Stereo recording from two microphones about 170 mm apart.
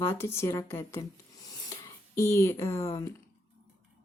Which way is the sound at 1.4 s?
15° left (ahead or behind).